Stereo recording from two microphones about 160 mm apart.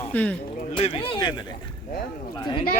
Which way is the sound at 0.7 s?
35° left (ahead or behind).